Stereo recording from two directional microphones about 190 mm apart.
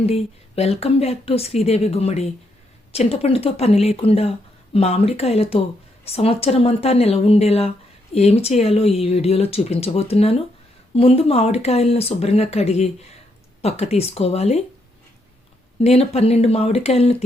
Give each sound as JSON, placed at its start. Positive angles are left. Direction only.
{"t": 0.0, "sound": "speech", "side_deg": 30}
{"t": 15.8, "sound": "speech", "side_deg": 35}